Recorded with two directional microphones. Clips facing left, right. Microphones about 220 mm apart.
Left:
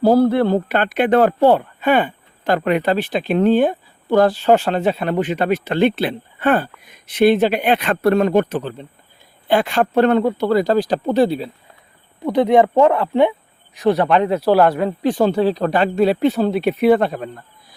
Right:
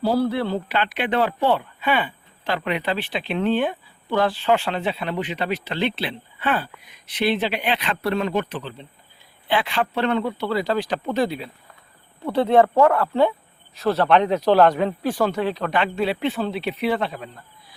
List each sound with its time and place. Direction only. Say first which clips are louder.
0.0 s speech: left 8 dB; 50° left (ahead or behind)
12.2 s speech: left 3 dB; 15° left (ahead or behind)
15.0 s speech: left 7 dB; 20° left (ahead or behind)
15.3 s speech: left 7 dB; 35° left (ahead or behind)